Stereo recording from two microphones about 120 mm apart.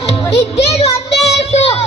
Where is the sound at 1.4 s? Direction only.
55° left (ahead or behind).